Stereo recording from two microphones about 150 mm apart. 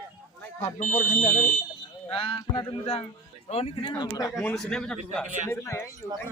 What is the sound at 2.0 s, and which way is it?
Speech, 40° left (ahead or behind).